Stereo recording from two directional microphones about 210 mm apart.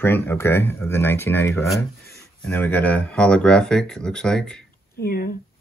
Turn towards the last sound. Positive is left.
turn(degrees=45)  # may be behind; listen again after turning